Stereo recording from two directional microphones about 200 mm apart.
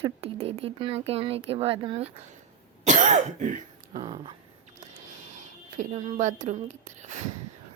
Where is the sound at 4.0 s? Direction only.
25° right (ahead or behind).